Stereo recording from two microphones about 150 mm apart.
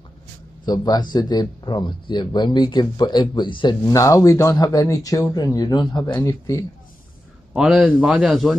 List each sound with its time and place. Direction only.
0.7 s speech: 25° left (ahead or behind)
6.1 s speech: 20° left (ahead or behind)
7.5 s speech: 5° right (ahead or behind)